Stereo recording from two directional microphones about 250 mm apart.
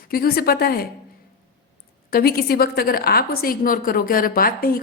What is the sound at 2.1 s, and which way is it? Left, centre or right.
A woman's voice, left.